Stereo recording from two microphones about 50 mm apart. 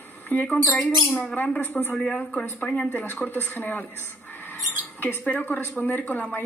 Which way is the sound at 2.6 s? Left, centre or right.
Left.